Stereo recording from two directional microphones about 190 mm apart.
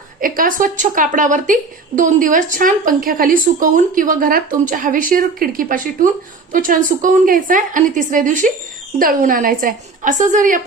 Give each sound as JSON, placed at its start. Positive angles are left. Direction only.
{"t": 0.2, "sound": "a woman's voice", "side_deg": -45}